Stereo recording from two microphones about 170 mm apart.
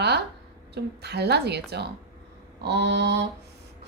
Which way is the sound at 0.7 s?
75° right (ahead or behind).